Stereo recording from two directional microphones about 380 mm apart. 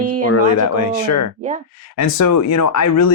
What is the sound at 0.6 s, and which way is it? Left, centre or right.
Speech, left.